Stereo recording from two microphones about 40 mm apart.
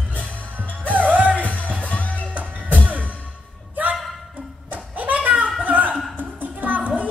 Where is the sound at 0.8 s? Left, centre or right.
Right.